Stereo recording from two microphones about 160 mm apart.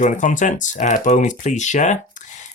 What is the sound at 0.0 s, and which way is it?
Speech, 50° left (ahead or behind).